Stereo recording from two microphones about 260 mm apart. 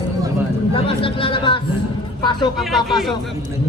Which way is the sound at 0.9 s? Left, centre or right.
Centre.